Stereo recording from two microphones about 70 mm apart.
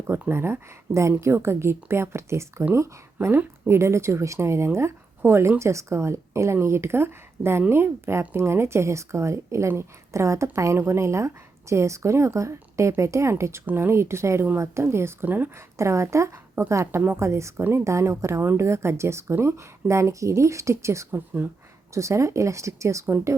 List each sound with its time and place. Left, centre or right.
0.3 s a woman's voice: right
13.7 s a woman's voice: right
15.8 s speech: right
17.6 s speech: right
17.8 s speech: right
21.4 s speech: right
21.9 s speech: right